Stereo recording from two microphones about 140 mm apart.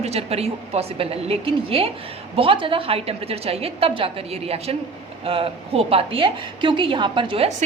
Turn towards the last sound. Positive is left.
turn(degrees=-40)  # may be behind; listen again after turning